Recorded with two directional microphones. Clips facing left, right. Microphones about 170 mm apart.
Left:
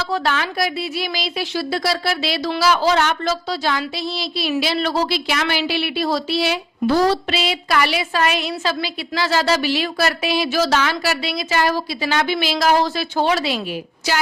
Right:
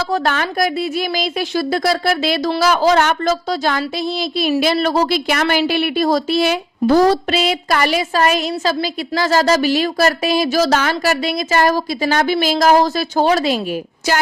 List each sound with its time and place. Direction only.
0.0 s speech: 50° right (ahead or behind)